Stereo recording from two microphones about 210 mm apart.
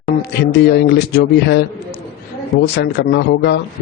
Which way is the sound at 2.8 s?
55° left (ahead or behind).